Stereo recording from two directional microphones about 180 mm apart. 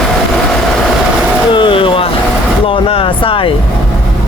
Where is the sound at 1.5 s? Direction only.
30° left (ahead or behind).